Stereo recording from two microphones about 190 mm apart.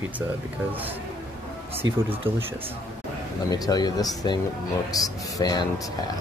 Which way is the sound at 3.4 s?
20° left (ahead or behind).